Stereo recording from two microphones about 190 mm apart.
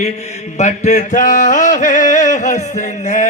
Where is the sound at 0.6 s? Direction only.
40° left (ahead or behind).